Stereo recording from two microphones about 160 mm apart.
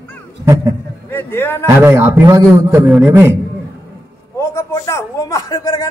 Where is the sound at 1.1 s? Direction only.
15° left (ahead or behind).